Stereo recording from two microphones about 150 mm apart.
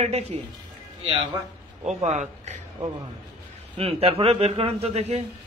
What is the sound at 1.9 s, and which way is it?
Speech, 50° right (ahead or behind).